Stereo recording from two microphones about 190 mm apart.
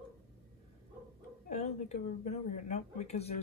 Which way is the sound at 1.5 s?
35° left (ahead or behind).